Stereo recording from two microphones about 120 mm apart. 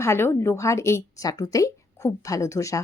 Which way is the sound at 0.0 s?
20° left (ahead or behind).